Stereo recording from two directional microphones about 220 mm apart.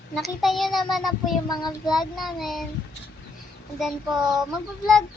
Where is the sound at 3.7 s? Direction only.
Centre (ahead or behind).